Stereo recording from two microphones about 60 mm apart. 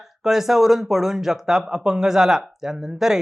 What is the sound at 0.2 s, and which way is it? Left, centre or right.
Speech, centre.